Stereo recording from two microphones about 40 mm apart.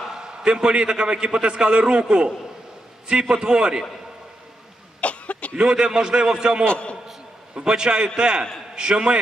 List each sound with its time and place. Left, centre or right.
0.0 s a man's voice: centre
4.9 s cough: left
5.5 s a man's voice: right
6.7 s a man's voice: left
7.5 s a man's voice: centre